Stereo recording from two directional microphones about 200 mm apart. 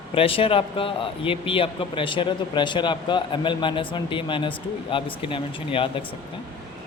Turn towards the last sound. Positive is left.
turn(degrees=25)  # may be behind; listen again after turning